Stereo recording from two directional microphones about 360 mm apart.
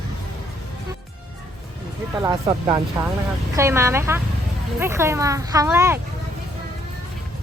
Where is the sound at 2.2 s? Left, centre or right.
Centre.